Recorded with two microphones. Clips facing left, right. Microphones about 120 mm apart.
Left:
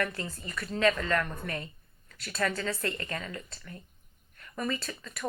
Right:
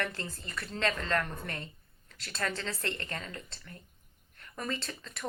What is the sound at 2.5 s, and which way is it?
A woman's voice, 30° right (ahead or behind).